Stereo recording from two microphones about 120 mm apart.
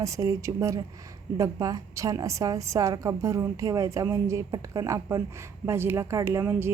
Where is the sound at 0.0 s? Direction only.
30° right (ahead or behind).